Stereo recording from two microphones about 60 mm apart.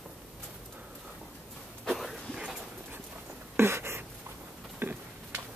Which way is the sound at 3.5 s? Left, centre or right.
Right.